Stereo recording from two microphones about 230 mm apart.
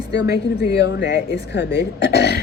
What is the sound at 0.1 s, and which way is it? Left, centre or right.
A woman's voice, left.